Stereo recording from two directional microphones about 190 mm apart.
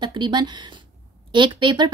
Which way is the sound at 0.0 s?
25° right (ahead or behind).